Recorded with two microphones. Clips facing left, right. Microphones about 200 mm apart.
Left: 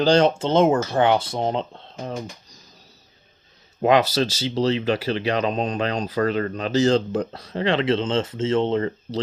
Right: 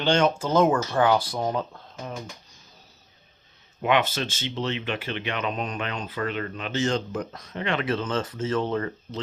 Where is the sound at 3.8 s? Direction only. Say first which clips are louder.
Left 6 dB; 35° left (ahead or behind).